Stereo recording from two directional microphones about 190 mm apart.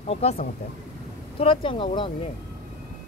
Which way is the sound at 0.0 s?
35° left (ahead or behind).